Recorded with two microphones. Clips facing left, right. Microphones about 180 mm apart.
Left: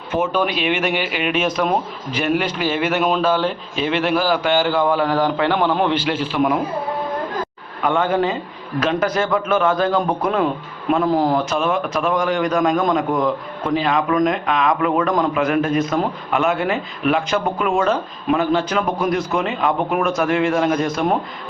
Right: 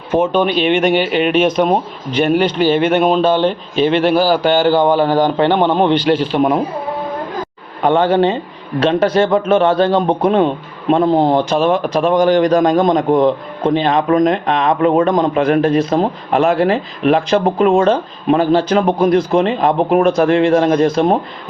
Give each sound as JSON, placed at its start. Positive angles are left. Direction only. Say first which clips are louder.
{"t": 0.1, "sound": "a man's voice", "louder": "right 6 dB", "side_deg": -30}
{"t": 7.8, "sound": "a man's voice", "louder": "right 6 dB", "side_deg": -30}